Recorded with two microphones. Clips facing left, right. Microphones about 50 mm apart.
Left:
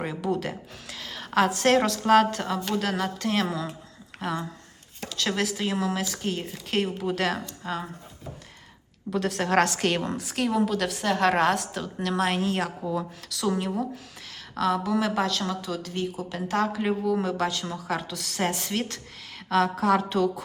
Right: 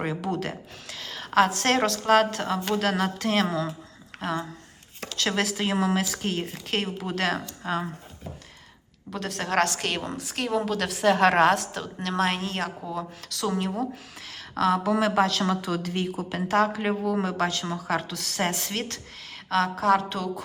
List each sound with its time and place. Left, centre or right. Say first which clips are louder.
0.0 s a woman's voice: right 2 dB; centre
0.3 s a woman's voice: left 1 dB; centre
7.6 s speech: right 6 dB; centre
9.1 s a woman's voice: left 7 dB; centre
9.5 s a woman's voice: left 1 dB; centre
10.3 s a woman's voice: left 1 dB; centre
12.4 s a woman's voice: left 3 dB; centre
12.9 s a woman's voice: left 2 dB; centre
15.4 s a woman's voice: right 4 dB; right
16.1 s a woman's voice: right 5 dB; centre